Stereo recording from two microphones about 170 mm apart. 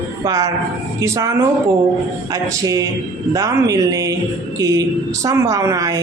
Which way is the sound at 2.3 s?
20° right (ahead or behind).